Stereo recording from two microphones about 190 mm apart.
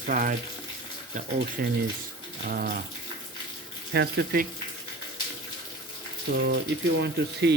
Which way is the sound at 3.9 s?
55° right (ahead or behind).